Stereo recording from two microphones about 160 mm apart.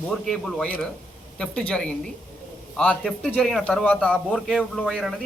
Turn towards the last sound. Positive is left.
turn(degrees=0)  # may be behind; listen again after turning